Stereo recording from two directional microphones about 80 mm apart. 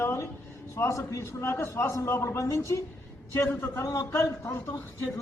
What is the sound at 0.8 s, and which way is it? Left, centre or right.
A man's voice, left.